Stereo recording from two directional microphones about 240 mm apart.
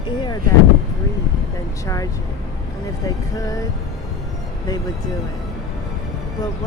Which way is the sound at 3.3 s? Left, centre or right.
Centre.